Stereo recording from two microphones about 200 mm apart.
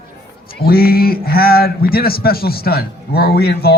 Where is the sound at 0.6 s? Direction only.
50° left (ahead or behind).